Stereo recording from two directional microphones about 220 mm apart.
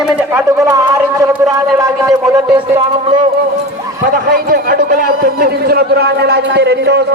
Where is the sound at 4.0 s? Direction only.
45° right (ahead or behind).